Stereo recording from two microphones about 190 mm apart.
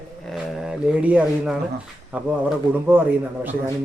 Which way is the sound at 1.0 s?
5° right (ahead or behind).